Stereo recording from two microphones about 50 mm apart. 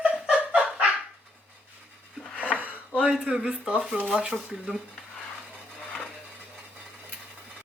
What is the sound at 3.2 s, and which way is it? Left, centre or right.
Speech, centre.